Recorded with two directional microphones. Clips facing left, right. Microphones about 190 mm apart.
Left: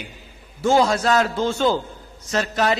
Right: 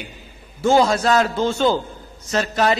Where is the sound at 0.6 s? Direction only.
25° right (ahead or behind).